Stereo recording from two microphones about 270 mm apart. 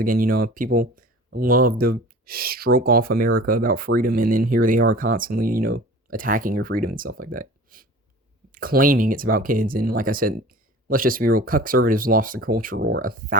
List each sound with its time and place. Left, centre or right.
0.0 s speech: right